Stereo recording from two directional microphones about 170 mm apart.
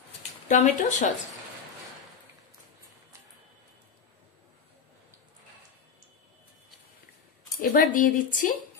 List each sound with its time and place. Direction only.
0.5 s a woman's voice: 45° left (ahead or behind)
7.7 s a woman's voice: 50° left (ahead or behind)